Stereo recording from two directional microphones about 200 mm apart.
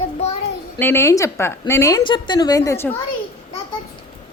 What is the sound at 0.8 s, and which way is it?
A woman's voice, 10° left (ahead or behind).